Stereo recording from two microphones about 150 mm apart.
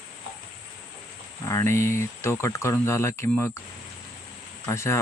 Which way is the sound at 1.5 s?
20° left (ahead or behind).